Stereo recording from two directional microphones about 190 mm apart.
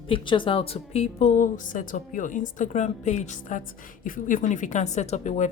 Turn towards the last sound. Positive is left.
turn(degrees=40)  # may be behind; listen again after turning